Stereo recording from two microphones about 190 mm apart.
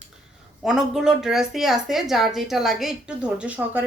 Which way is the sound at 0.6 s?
Centre (ahead or behind).